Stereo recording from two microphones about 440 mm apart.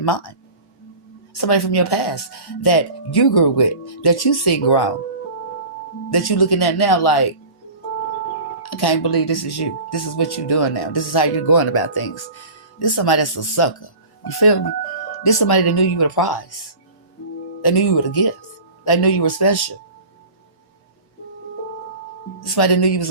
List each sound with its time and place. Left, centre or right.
0.0 s speech: left
6.1 s speech: left
8.7 s speech: left
17.6 s speech: left
22.4 s speech: left